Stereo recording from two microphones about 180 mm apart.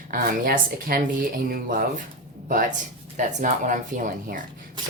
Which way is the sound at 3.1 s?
45° right (ahead or behind).